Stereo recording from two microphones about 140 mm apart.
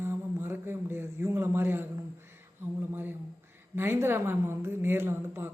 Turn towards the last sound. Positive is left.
turn(degrees=-15)  # may be behind; listen again after turning